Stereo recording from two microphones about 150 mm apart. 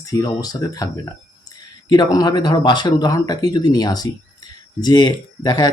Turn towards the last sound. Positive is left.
turn(degrees=25)  # may be behind; listen again after turning